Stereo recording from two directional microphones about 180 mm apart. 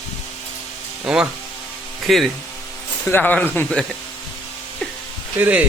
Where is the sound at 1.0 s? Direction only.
5° right (ahead or behind).